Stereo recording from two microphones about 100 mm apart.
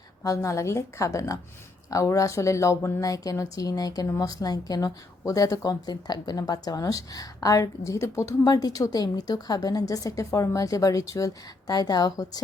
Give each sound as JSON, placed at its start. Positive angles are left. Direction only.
{"t": 0.3, "sound": "speech", "side_deg": 30}